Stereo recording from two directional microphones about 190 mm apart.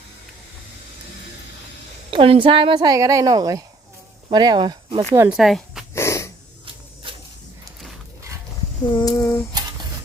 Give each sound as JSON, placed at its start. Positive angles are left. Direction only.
{"t": 2.0, "sound": "speech", "side_deg": -30}
{"t": 5.4, "sound": "speech", "side_deg": 0}
{"t": 5.9, "sound": "dog", "side_deg": 15}
{"t": 9.0, "sound": "a sound", "side_deg": 20}